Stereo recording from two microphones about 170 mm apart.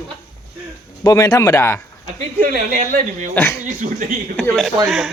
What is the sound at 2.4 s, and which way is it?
Speech, 55° right (ahead or behind).